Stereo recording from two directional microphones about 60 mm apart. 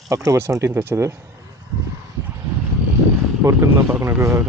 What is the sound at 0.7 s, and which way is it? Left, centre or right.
Speech, right.